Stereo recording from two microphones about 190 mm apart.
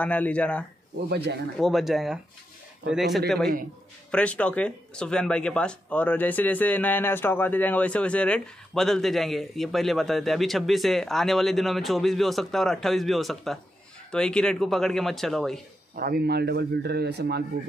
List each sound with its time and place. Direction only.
0.0 s speech: 5° left (ahead or behind)
1.1 s speech: 60° right (ahead or behind)
1.6 s speech: centre (ahead or behind)
16.0 s speech: 55° right (ahead or behind)